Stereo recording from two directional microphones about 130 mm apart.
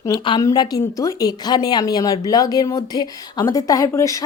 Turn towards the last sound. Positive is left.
turn(degrees=25)  # may be behind; listen again after turning